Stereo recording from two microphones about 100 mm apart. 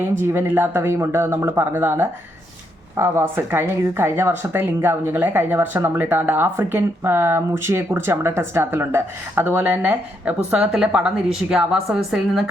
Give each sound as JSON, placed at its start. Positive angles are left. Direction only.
{"t": 0.2, "sound": "a woman's voice", "side_deg": -20}